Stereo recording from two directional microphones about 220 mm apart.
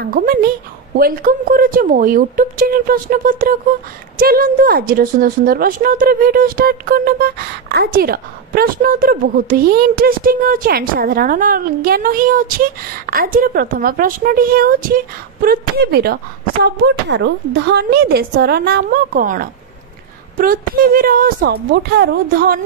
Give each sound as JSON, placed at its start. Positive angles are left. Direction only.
{"t": 0.0, "sound": "a woman's voice", "side_deg": -40}